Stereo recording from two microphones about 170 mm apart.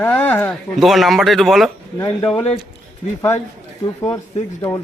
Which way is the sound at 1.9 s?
20° left (ahead or behind).